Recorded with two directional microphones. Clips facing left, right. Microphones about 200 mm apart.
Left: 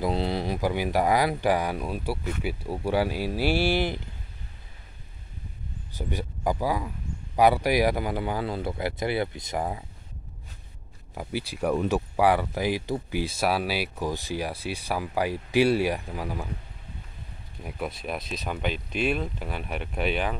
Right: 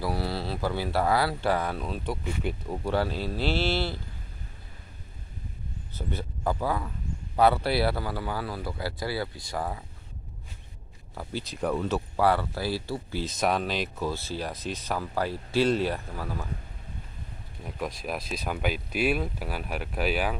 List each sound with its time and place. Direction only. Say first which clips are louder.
0.0 s speech: left 4 dB; 20° left (ahead or behind)
5.9 s speech: left 2 dB; 15° left (ahead or behind)
11.1 s speech: left 2 dB; 10° left (ahead or behind)
17.6 s speech: left 1 dB; 5° left (ahead or behind)